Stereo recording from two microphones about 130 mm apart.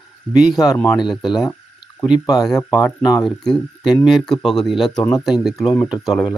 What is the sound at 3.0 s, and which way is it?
Speech, 30° left (ahead or behind).